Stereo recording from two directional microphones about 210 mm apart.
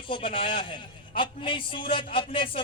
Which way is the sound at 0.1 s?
25° left (ahead or behind).